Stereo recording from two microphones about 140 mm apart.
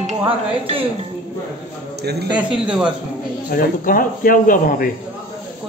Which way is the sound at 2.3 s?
10° right (ahead or behind).